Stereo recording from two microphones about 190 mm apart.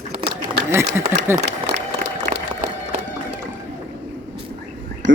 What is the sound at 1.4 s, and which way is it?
Applause, 65° right (ahead or behind).